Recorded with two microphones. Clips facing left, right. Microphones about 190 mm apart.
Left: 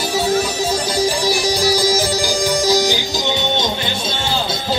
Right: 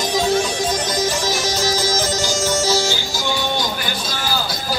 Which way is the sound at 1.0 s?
15° left (ahead or behind).